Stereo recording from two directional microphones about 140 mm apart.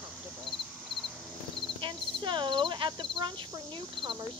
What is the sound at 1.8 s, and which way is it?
Speech, 35° right (ahead or behind).